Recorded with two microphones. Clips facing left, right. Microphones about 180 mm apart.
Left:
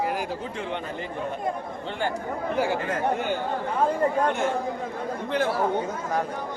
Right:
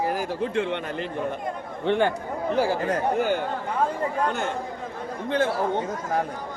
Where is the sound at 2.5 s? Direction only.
35° right (ahead or behind).